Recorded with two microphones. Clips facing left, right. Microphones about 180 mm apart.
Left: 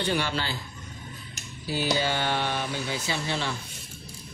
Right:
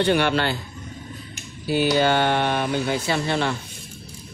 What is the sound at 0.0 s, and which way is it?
Speech, 65° right (ahead or behind).